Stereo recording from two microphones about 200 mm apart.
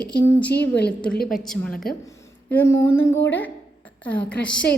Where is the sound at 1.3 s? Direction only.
Centre (ahead or behind).